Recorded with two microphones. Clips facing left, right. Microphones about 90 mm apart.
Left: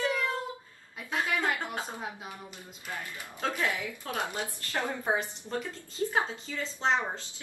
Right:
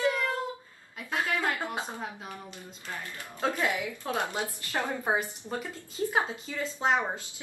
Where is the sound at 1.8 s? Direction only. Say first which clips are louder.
Right 2 dB; 15° right (ahead or behind).